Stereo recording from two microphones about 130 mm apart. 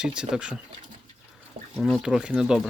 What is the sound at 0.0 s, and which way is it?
Speech, 5° right (ahead or behind).